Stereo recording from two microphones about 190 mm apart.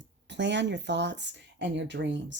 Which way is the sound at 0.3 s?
65° right (ahead or behind).